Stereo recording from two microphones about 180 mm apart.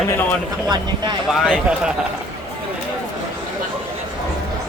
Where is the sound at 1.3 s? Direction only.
Centre (ahead or behind).